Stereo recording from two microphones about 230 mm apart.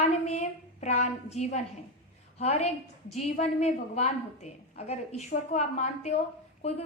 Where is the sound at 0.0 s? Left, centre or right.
Left.